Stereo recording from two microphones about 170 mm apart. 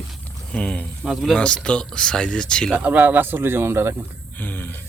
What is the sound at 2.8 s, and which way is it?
Speech, 10° right (ahead or behind).